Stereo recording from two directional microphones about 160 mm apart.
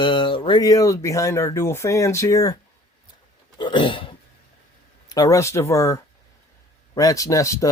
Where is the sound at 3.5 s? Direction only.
30° left (ahead or behind).